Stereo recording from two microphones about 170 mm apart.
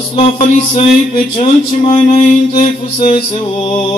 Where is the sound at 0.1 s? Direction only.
30° left (ahead or behind).